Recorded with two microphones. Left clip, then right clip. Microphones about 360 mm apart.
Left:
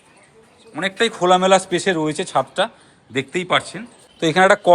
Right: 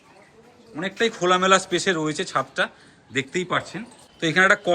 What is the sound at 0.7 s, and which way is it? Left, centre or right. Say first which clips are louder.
A man's voice: left 4 dB; centre.